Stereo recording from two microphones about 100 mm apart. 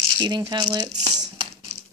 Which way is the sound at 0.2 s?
45° right (ahead or behind).